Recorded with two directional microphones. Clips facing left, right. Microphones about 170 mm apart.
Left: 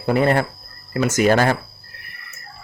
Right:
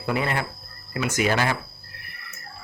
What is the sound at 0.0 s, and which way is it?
Speech, 40° left (ahead or behind).